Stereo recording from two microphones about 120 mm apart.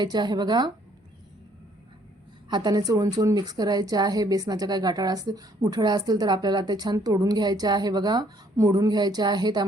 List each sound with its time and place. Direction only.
0.0 s a woman's voice: 35° right (ahead or behind)
2.5 s a woman's voice: 35° right (ahead or behind)